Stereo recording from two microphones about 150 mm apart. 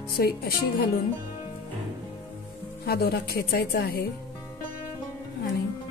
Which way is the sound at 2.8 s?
90° left.